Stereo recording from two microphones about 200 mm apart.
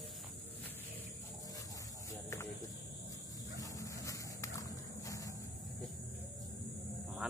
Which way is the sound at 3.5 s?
15° left (ahead or behind).